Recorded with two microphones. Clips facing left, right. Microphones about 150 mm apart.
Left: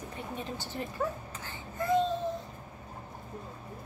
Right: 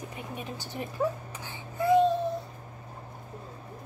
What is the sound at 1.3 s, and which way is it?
Babbling, 10° right (ahead or behind).